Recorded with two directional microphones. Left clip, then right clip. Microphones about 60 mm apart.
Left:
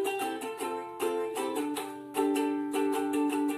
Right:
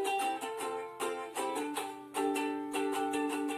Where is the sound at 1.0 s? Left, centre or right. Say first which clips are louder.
Left 8 dB; left.